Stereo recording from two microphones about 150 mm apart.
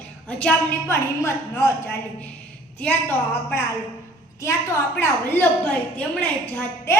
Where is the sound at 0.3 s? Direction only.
10° left (ahead or behind).